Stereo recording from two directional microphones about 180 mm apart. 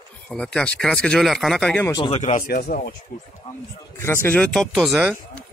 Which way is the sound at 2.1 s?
40° left (ahead or behind).